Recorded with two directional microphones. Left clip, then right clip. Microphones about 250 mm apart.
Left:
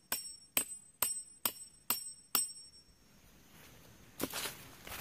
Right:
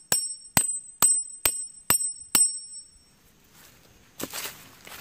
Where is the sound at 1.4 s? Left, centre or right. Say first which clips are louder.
Right 11 dB; right.